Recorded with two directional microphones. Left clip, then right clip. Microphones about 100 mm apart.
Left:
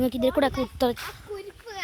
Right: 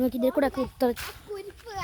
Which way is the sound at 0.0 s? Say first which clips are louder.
Left 2 dB; 15° right (ahead or behind).